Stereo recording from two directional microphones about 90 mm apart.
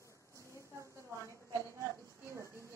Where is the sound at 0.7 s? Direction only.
35° right (ahead or behind).